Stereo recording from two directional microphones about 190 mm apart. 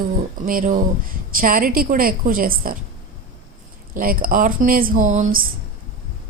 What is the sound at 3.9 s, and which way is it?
Speech, 50° right (ahead or behind).